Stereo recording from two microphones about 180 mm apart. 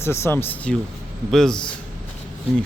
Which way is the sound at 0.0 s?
15° left (ahead or behind).